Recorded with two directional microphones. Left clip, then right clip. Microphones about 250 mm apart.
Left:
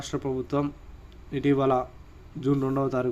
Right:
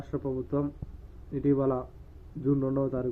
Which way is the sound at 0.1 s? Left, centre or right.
Centre.